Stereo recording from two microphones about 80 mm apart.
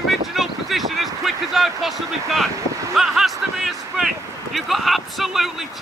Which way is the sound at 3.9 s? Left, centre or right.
Centre.